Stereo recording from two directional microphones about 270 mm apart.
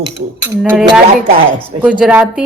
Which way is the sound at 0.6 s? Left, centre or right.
Centre.